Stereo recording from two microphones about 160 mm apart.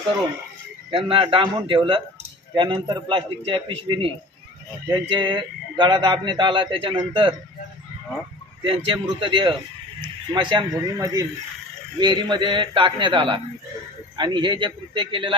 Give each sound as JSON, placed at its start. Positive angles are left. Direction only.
{"t": 0.9, "sound": "speech", "side_deg": -35}
{"t": 8.6, "sound": "a man's voice", "side_deg": -35}